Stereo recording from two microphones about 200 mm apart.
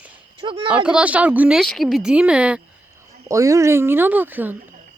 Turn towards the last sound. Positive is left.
turn(degrees=-10)  # may be behind; listen again after turning